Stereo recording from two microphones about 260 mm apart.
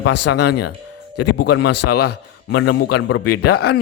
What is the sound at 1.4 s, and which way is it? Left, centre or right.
Speech, left.